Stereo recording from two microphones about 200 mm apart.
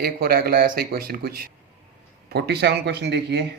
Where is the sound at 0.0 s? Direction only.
50° right (ahead or behind).